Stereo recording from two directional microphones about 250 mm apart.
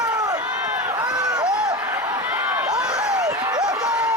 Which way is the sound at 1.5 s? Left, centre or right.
Centre.